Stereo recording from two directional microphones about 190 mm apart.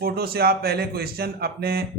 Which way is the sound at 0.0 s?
55° right (ahead or behind).